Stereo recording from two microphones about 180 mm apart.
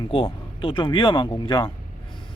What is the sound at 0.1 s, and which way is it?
Speech, 30° left (ahead or behind).